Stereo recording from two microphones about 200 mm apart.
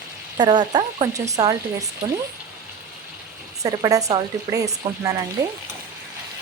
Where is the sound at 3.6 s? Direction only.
15° right (ahead or behind).